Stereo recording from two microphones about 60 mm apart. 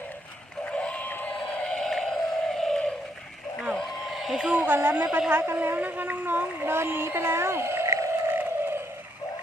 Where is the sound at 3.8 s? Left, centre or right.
Centre.